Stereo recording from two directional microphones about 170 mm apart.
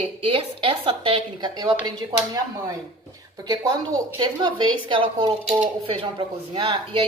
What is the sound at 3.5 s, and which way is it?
A woman's voice, 20° right (ahead or behind).